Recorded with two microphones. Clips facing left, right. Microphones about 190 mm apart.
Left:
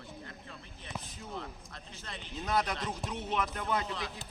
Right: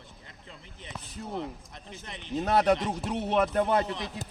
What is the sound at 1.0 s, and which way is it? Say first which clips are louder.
Basketball bounce: right 6 dB; 65° right (ahead or behind).